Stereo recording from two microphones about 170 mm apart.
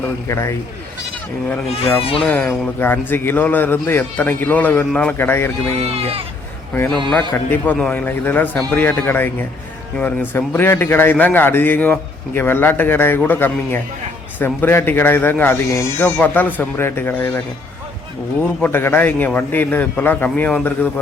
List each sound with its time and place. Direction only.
0.3 s a man's voice: 15° left (ahead or behind)
2.0 s speech: 35° left (ahead or behind)
2.2 s a man's voice: 10° left (ahead or behind)
5.9 s speech: 35° right (ahead or behind)
6.7 s a man's voice: 5° left (ahead or behind)
18.6 s a man's voice: 10° left (ahead or behind)